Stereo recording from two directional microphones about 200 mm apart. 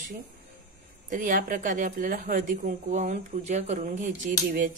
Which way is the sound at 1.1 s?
40° right (ahead or behind).